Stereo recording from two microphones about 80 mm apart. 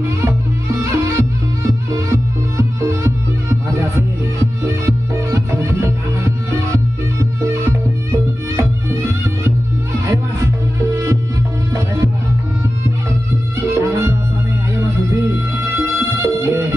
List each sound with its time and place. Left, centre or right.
0.8 s music: right
13.7 s music: right
15.7 s music: right